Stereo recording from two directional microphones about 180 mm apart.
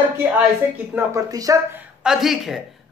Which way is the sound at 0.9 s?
10° right (ahead or behind).